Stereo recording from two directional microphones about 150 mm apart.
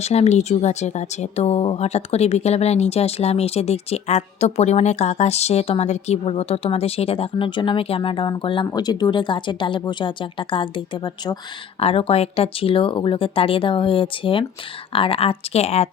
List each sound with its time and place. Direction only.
0.0 s speech: 45° left (ahead or behind)